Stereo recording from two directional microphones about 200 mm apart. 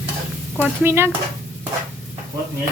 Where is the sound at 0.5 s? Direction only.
10° right (ahead or behind).